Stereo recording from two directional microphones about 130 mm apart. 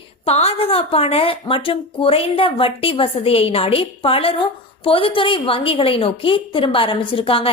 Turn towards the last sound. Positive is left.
turn(degrees=45)  # may be behind; listen again after turning